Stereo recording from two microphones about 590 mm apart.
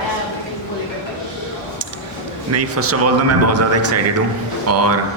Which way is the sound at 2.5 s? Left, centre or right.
Right.